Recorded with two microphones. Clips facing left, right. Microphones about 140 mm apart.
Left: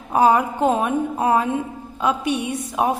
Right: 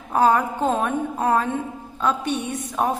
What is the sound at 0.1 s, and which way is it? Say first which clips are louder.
A woman's voice: left 2 dB; 10° left (ahead or behind).